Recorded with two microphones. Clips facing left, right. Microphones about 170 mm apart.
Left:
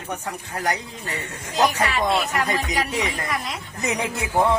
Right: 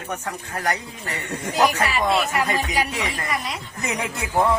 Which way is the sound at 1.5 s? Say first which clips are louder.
Even; centre (ahead or behind).